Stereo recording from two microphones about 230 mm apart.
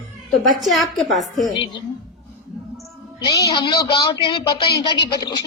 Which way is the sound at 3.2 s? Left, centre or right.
Centre.